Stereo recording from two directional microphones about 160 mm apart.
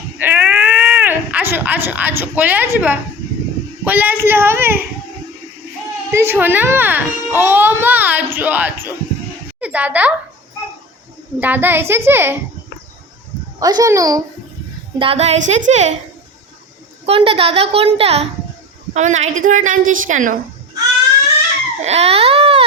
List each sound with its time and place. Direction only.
0.2 s baby cry: 10° right (ahead or behind)
3.8 s a child's voice: 10° right (ahead or behind)
6.1 s a child's voice: 15° right (ahead or behind)
9.6 s a sound: 10° right (ahead or behind)
11.3 s a child's voice: 10° right (ahead or behind)
13.6 s a child's voice: 25° right (ahead or behind)
14.9 s a woman's voice: 35° right (ahead or behind)
17.1 s a woman's voice: 35° right (ahead or behind); by 20.3 s 55° right (ahead or behind)
21.8 s baby cry: 40° right (ahead or behind)